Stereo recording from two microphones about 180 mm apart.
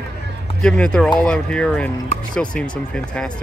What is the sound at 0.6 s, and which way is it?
Speech, 5° left (ahead or behind).